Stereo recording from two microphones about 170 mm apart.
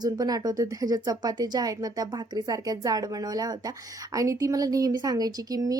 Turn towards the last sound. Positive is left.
turn(degrees=-20)  # may be behind; listen again after turning